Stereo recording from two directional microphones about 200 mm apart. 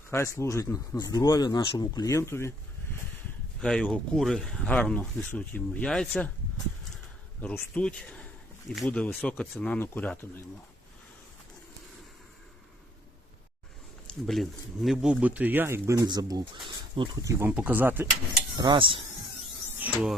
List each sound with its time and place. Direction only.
0.1 s speech: 15° left (ahead or behind)
3.6 s speech: 5° left (ahead or behind)
7.4 s speech: 10° left (ahead or behind)
14.1 s speech: centre (ahead or behind); by 17.3 s 25° right (ahead or behind)
17.4 s speech: 10° right (ahead or behind)
18.5 s cutlery: 20° right (ahead or behind)